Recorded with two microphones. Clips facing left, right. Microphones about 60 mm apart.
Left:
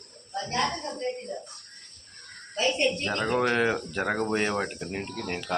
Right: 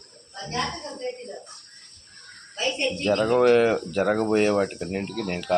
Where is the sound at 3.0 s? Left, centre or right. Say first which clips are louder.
Right 6 dB; left.